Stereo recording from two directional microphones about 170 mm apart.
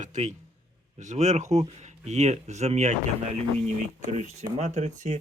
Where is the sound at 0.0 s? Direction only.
45° right (ahead or behind).